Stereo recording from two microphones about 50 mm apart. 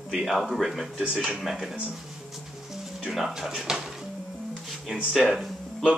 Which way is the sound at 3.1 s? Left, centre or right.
Centre.